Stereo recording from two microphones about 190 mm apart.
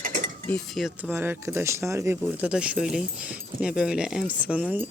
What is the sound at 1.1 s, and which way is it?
Speech, 10° right (ahead or behind).